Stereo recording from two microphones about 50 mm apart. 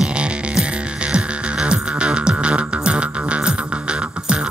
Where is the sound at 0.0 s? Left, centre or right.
Right.